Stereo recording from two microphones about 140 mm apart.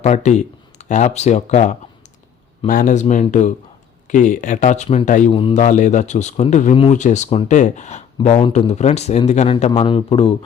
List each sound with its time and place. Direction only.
0.0 s speech: 55° left (ahead or behind)
2.6 s a man's voice: 75° left (ahead or behind); by 5.0 s 50° left (ahead or behind)
5.0 s a man's voice: 65° left (ahead or behind)
5.3 s speech: 40° left (ahead or behind)
5.5 s a man's voice: 60° left (ahead or behind)
7.5 s a man's voice: 60° left (ahead or behind); by 10.3 s 40° left (ahead or behind)